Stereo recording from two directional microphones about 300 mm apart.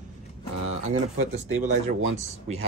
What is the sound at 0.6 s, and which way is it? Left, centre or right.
Speech, right.